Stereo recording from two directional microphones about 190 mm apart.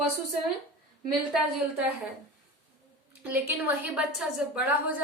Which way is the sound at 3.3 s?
10° right (ahead or behind).